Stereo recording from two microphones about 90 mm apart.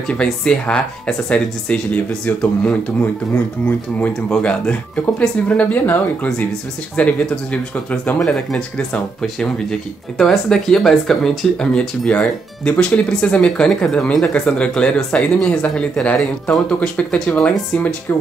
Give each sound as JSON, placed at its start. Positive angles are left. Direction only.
{"t": 0.1, "sound": "speech", "side_deg": 10}
{"t": 4.3, "sound": "speech", "side_deg": 10}